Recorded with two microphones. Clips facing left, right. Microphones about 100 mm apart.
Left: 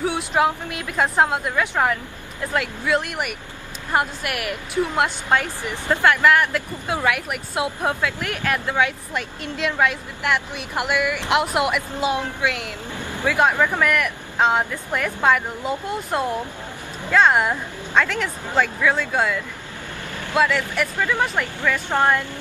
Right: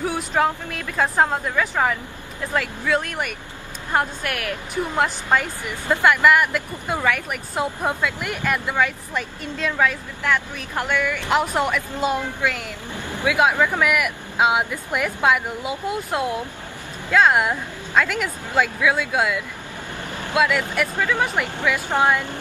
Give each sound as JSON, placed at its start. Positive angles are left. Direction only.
{"t": 0.3, "sound": "speech", "side_deg": 10}
{"t": 12.9, "sound": "a sound", "side_deg": -15}
{"t": 13.3, "sound": "speech", "side_deg": -5}